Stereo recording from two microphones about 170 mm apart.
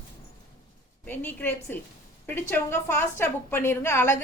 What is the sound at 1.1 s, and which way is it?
A woman's voice, 10° left (ahead or behind).